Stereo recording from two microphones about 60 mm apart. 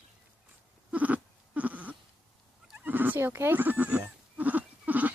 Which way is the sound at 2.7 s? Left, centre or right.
Right.